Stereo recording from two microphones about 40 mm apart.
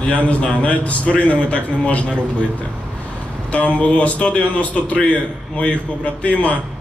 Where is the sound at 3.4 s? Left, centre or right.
Left.